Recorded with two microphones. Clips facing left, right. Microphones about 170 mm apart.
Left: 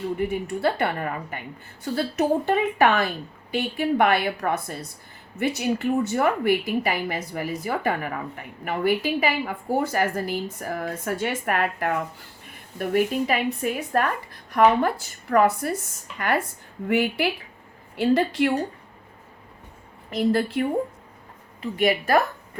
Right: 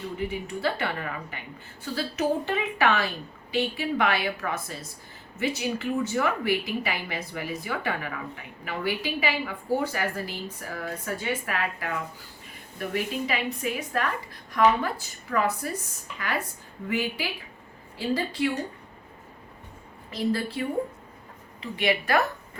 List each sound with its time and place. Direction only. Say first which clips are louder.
0.2 s a woman's voice: left 2 dB; 50° left (ahead or behind)
21.6 s speech: left 4 dB; 45° left (ahead or behind)